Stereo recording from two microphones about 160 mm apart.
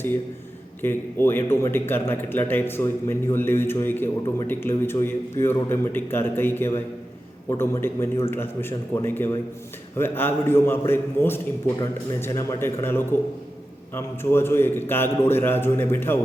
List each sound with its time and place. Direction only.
0.8 s a man's voice: 15° left (ahead or behind)